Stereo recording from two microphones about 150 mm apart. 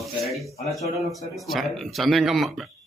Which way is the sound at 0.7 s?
Centre (ahead or behind).